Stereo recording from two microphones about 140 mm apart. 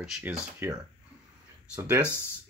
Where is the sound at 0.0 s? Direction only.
10° right (ahead or behind).